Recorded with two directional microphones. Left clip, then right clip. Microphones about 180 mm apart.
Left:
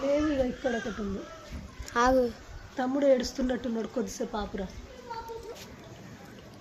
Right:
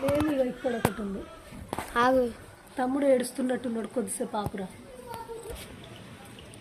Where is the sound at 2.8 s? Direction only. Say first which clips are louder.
Even; 20° right (ahead or behind).